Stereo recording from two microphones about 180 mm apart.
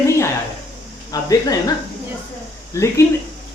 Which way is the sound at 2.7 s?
15° left (ahead or behind).